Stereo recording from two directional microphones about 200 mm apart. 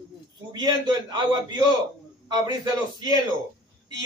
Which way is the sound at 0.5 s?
20° right (ahead or behind).